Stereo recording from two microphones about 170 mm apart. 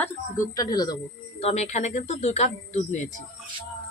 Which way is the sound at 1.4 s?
40° left (ahead or behind).